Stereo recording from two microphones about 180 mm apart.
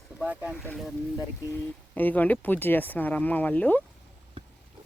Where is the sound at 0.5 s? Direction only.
10° left (ahead or behind).